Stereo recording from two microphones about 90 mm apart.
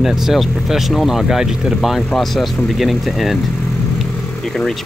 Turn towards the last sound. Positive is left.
turn(degrees=0)  # may be behind; listen again after turning